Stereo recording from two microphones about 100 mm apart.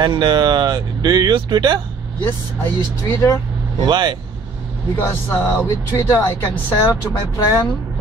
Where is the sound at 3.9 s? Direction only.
50° right (ahead or behind).